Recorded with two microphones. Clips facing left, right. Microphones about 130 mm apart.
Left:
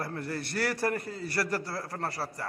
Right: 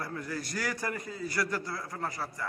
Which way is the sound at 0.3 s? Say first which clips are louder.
Left 4 dB; 65° left (ahead or behind).